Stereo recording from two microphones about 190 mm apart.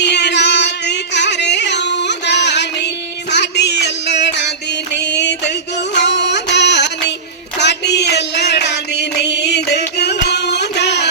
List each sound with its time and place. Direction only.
0.0 s music: 65° left (ahead or behind)
5.9 s a sound: 65° left (ahead or behind)
7.6 s music: 65° left (ahead or behind)